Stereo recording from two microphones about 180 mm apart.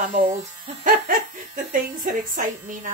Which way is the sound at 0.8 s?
50° right (ahead or behind).